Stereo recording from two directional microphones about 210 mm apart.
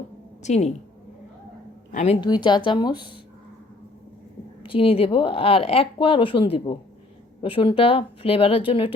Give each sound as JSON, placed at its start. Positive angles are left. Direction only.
{"t": 0.4, "sound": "a woman's voice", "side_deg": 35}
{"t": 1.9, "sound": "a woman's voice", "side_deg": 35}
{"t": 2.2, "sound": "speech", "side_deg": 20}
{"t": 4.6, "sound": "speech", "side_deg": 25}